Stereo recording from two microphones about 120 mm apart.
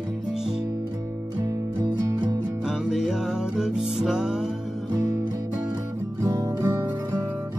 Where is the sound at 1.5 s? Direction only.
40° right (ahead or behind).